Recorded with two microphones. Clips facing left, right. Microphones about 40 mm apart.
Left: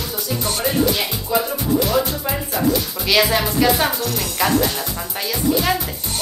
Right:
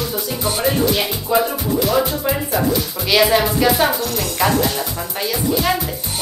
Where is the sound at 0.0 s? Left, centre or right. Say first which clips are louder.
Right 3 dB; centre.